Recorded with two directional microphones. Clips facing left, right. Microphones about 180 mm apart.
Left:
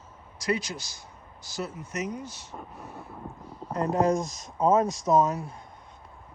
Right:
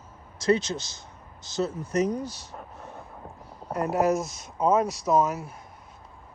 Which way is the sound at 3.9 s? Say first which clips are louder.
Even; 5° right (ahead or behind).